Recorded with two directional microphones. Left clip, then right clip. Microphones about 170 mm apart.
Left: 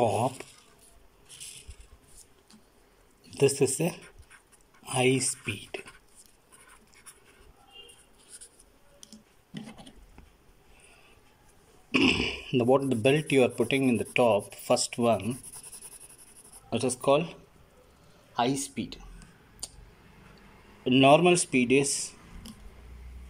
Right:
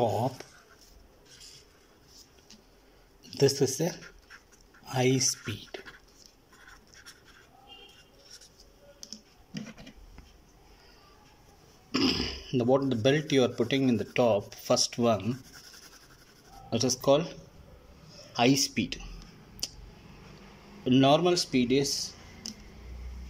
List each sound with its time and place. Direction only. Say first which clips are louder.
0.0 s speech: left 2 dB; 15° left (ahead or behind)
3.3 s speech: left 1 dB; 5° left (ahead or behind)
11.9 s speech: left 4 dB; 10° left (ahead or behind)
16.6 s speech: even; 5° left (ahead or behind)
18.3 s speech: right 3 dB; 10° right (ahead or behind)
20.8 s speech: left 3 dB; 10° left (ahead or behind)